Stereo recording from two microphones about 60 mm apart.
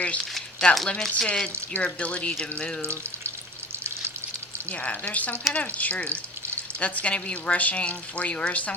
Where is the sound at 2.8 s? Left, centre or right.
Right.